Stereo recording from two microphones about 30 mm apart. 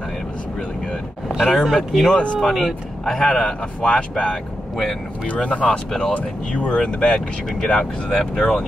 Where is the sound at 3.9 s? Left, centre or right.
Left.